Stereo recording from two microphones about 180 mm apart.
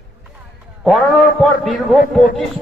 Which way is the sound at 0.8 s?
Centre (ahead or behind).